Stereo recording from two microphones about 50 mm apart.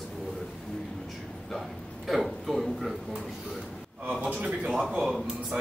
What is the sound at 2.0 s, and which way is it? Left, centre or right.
Speech, centre.